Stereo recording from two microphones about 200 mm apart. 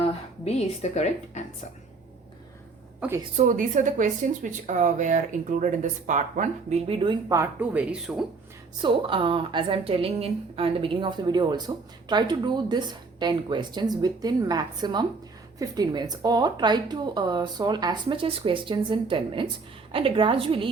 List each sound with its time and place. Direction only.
0.0 s a woman's voice: 30° left (ahead or behind)
3.3 s speech: 40° right (ahead or behind); by 8.2 s 5° right (ahead or behind)
8.8 s a woman's voice: 25° right (ahead or behind)